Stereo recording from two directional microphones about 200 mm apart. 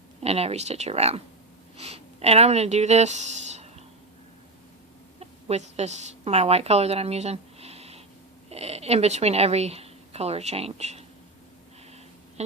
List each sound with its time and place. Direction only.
0.2 s speech: 30° right (ahead or behind)
5.2 s a woman's voice: 30° right (ahead or behind)
12.4 s speech: 35° right (ahead or behind)